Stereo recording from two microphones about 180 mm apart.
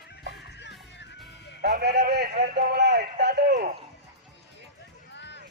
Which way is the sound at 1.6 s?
65° right (ahead or behind).